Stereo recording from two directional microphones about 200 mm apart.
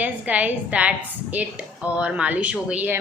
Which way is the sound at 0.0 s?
5° right (ahead or behind).